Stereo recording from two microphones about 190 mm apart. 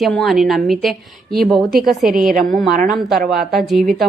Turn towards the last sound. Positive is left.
turn(degrees=0)  # may be behind; listen again after turning